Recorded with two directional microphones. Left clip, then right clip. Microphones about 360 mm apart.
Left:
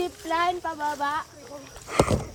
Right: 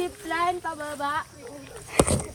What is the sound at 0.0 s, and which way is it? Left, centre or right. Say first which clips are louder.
Speech: left 1 dB; centre.